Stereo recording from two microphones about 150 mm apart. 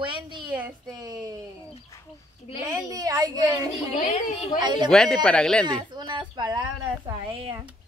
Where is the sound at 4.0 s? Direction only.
50° left (ahead or behind).